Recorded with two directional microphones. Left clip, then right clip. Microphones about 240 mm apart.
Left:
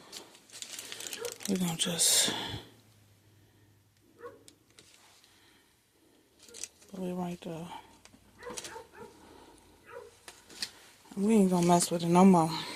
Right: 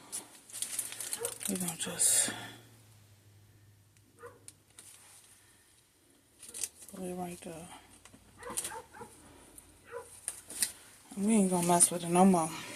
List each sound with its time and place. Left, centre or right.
1.5 s speech: left
6.6 s speech: left
11.1 s speech: left